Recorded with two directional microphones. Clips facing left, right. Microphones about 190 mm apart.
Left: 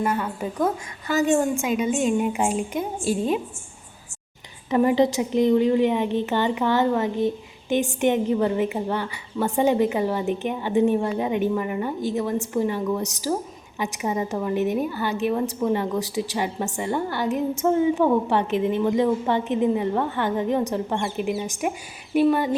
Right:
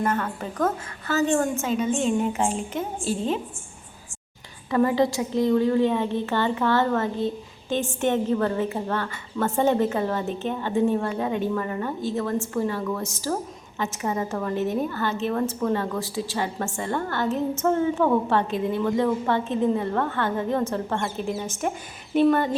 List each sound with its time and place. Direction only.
0.0 s a woman's voice: 10° left (ahead or behind)
4.7 s a woman's voice: 20° left (ahead or behind)